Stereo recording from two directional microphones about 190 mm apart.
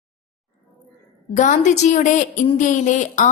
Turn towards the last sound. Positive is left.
turn(degrees=40)  # may be behind; listen again after turning